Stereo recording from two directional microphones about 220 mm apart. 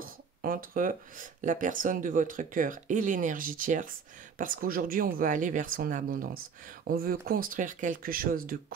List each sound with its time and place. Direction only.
0.0 s speech: 40° right (ahead or behind)